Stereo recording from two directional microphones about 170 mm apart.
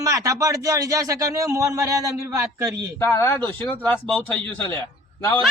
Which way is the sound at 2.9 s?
15° left (ahead or behind).